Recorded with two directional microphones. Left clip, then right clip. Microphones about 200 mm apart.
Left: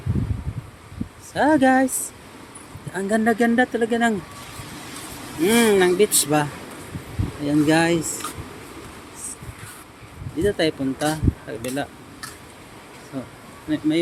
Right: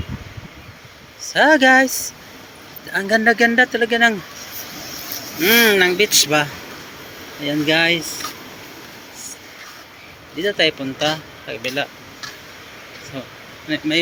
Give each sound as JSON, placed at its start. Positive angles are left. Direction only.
{"t": 1.2, "sound": "speech", "side_deg": 10}
{"t": 2.9, "sound": "speech", "side_deg": 10}
{"t": 5.4, "sound": "speech", "side_deg": 10}
{"t": 10.4, "sound": "speech", "side_deg": 25}
{"t": 13.2, "sound": "speech", "side_deg": 30}
{"t": 13.7, "sound": "speech", "side_deg": 15}